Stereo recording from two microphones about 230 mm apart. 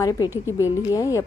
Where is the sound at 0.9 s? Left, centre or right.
Centre.